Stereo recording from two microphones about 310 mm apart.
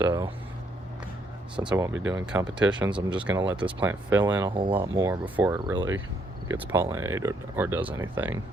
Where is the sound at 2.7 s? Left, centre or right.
Centre.